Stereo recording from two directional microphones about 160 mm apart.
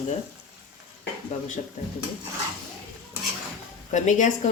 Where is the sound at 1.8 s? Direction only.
50° left (ahead or behind).